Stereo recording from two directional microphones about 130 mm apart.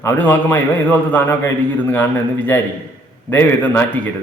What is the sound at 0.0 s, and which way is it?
A man's voice, 20° left (ahead or behind).